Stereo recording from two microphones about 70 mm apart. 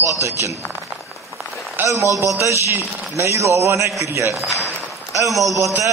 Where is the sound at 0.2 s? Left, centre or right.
Right.